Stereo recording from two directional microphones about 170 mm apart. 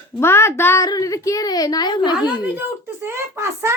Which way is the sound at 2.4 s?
10° right (ahead or behind).